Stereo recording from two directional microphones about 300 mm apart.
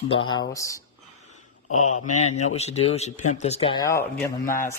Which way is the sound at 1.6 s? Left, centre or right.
Left.